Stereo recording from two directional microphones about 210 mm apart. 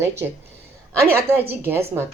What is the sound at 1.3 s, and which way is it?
Speech, 10° right (ahead or behind).